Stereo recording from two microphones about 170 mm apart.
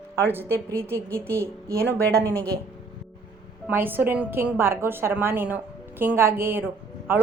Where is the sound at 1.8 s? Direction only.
10° left (ahead or behind).